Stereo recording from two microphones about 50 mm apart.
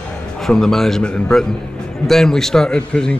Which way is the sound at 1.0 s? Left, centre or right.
Centre.